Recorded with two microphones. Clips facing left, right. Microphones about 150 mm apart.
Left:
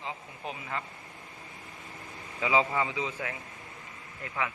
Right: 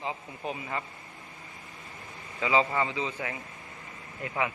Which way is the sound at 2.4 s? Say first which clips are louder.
Right 1 dB; 10° left (ahead or behind).